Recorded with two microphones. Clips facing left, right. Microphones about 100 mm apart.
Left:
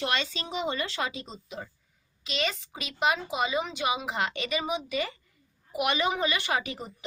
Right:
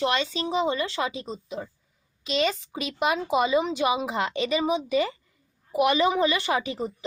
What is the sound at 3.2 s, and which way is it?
Speech, 40° right (ahead or behind).